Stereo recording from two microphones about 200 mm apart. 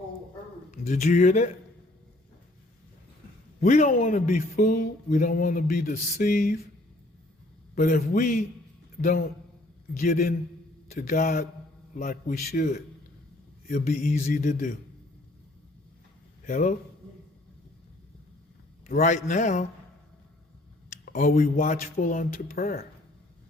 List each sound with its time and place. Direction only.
0.7 s speech: 35° left (ahead or behind)
3.6 s speech: 40° left (ahead or behind)
7.8 s speech: 45° left (ahead or behind)
9.0 s speech: 50° left (ahead or behind)
16.5 s speech: 40° left (ahead or behind)
18.9 s speech: 40° left (ahead or behind)
20.9 s speech: 40° left (ahead or behind)